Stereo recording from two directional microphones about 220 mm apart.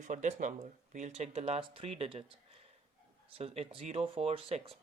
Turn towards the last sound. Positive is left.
turn(degrees=-25)  # may be behind; listen again after turning